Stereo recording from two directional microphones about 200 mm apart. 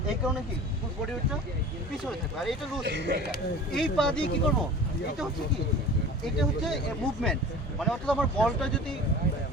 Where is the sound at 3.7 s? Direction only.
5° left (ahead or behind).